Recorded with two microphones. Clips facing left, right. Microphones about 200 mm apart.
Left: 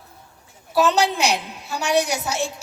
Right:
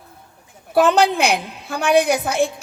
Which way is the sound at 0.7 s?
55° right (ahead or behind).